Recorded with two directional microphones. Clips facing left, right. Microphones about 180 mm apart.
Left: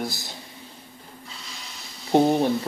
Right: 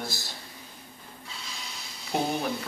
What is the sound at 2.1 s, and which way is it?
Speech, 30° left (ahead or behind).